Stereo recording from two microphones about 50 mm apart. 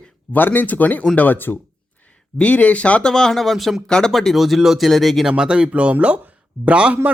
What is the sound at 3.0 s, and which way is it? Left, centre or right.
Speech, centre.